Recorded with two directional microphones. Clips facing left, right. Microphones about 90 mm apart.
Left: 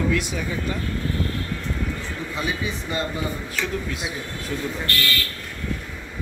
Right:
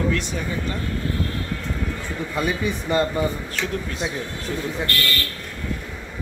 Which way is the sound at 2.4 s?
55° right (ahead or behind).